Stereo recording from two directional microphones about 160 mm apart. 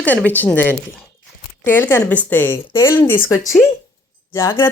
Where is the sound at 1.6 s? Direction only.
15° left (ahead or behind).